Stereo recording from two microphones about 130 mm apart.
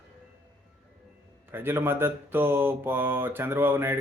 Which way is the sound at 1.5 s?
15° right (ahead or behind).